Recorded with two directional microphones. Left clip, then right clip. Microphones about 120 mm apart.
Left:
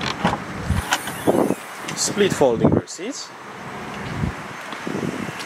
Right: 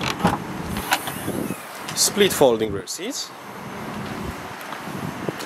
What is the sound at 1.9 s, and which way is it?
Speech, 20° right (ahead or behind).